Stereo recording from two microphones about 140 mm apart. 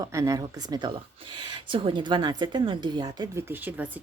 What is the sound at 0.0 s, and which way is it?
Speech, 20° right (ahead or behind).